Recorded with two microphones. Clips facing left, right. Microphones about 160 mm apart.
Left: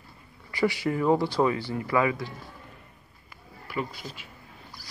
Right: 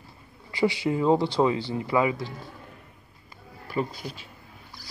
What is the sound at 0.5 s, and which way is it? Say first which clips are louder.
Speech: right 2 dB; 25° right (ahead or behind).